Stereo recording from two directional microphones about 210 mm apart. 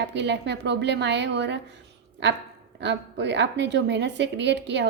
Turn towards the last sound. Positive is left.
turn(degrees=-55)  # may be behind; listen again after turning